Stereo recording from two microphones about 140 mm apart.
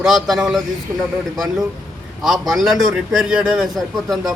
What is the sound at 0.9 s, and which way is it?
Speech, 15° right (ahead or behind).